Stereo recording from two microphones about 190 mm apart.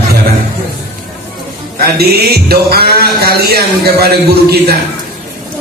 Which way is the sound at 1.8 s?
55° right (ahead or behind).